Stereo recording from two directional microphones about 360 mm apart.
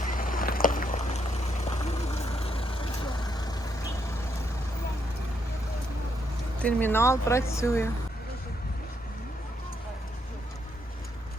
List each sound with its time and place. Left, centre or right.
0.0 s boat: left
1.6 s vehicle: centre
6.6 s speech: centre